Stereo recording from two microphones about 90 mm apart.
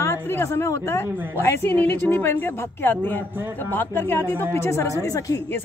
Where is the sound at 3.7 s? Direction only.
25° left (ahead or behind).